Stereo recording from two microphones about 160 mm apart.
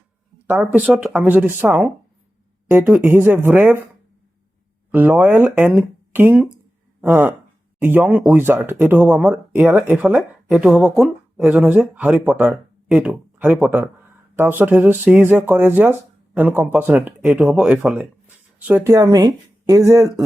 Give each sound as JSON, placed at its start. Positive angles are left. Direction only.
{"t": 0.4, "sound": "speech", "side_deg": -5}
{"t": 4.9, "sound": "speech", "side_deg": -10}